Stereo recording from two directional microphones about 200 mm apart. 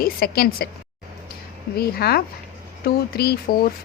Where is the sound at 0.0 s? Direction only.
50° left (ahead or behind).